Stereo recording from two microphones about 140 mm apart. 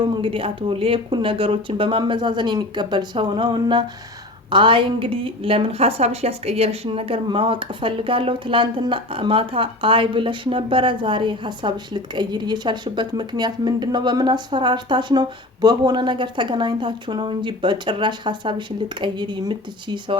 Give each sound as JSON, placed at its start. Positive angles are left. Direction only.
{"t": 0.0, "sound": "a woman's voice", "side_deg": -40}